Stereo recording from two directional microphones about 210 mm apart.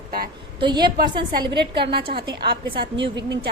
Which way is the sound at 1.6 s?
50° right (ahead or behind).